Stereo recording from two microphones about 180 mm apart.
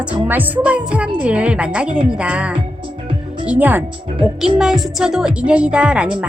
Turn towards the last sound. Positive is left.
turn(degrees=-5)  # may be behind; listen again after turning